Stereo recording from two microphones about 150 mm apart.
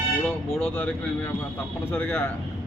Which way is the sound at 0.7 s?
10° left (ahead or behind).